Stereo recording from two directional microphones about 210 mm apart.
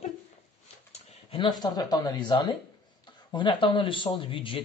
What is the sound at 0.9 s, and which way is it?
Speech, 30° left (ahead or behind).